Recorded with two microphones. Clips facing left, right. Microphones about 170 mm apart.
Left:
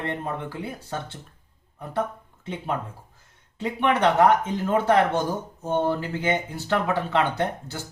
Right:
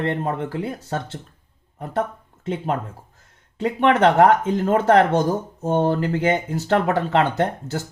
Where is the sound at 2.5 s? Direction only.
45° right (ahead or behind).